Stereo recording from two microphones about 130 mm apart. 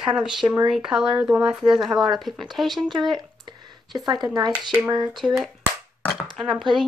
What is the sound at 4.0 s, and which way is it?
Speech, 35° right (ahead or behind).